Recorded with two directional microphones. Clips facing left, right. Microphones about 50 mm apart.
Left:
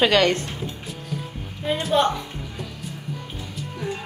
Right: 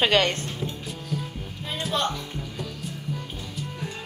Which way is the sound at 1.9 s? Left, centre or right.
Centre.